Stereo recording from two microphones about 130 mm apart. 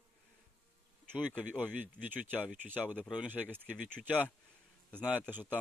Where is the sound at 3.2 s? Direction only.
10° left (ahead or behind).